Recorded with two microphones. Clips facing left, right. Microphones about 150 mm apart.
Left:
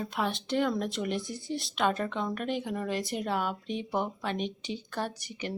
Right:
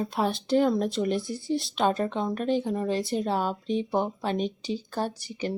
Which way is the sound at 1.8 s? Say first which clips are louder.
Right 2 dB; 30° right (ahead or behind).